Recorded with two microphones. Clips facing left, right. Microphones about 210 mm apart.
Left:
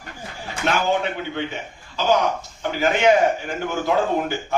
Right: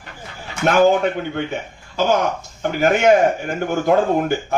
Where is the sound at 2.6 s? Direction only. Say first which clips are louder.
Right 4 dB; 50° right (ahead or behind).